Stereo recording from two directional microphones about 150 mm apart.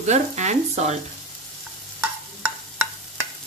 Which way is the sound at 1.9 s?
15° right (ahead or behind).